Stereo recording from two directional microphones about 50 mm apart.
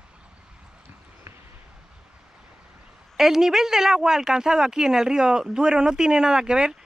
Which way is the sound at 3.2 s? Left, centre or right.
Centre.